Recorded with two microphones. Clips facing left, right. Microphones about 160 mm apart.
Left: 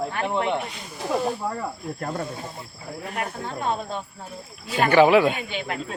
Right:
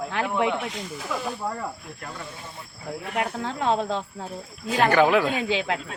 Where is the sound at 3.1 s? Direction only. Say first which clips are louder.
Right 3 dB; 90° right.